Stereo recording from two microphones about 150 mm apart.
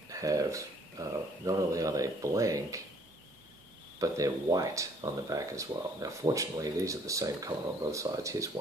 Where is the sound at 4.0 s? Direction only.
20° right (ahead or behind).